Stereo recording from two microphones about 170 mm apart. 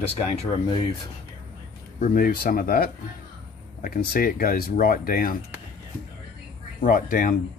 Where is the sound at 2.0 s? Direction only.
60° left (ahead or behind).